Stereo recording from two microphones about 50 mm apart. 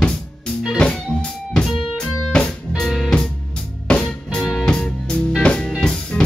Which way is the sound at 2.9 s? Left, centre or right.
Centre.